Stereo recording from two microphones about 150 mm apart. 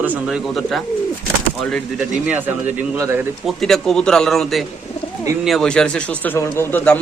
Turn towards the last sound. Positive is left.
turn(degrees=15)  # may be behind; listen again after turning